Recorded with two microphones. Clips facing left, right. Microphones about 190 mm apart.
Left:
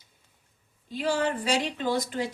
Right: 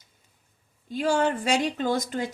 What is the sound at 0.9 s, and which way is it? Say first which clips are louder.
A woman's voice: right 3 dB; 50° right (ahead or behind).